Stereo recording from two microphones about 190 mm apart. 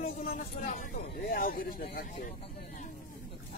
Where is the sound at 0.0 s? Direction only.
50° left (ahead or behind).